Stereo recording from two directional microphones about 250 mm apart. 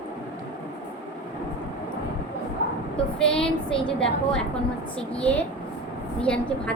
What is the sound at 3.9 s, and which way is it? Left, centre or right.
Speech, centre.